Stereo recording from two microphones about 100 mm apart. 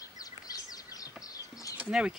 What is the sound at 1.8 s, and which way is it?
Speech, 10° right (ahead or behind).